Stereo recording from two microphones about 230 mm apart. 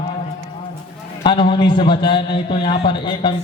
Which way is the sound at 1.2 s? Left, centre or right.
Left.